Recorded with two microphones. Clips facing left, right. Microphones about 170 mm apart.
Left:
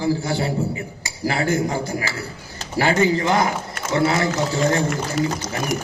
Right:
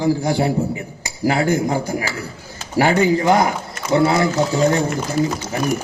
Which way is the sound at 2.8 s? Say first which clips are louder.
Right 3 dB; 15° right (ahead or behind).